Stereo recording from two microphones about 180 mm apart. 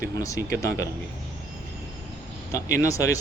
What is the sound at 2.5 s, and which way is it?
Speech, 15° left (ahead or behind).